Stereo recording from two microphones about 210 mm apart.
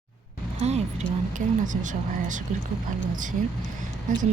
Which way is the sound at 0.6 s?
30° right (ahead or behind).